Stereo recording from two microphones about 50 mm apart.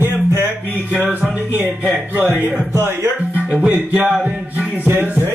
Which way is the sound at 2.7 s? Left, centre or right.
Right.